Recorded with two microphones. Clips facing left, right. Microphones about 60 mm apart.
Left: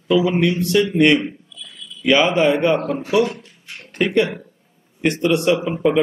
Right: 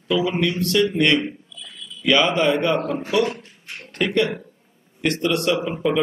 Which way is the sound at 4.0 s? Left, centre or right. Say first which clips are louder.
Left 3 dB; centre.